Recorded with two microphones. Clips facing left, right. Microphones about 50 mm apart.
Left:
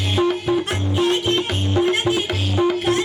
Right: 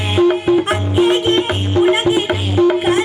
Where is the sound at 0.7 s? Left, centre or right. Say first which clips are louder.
Right 6 dB; centre.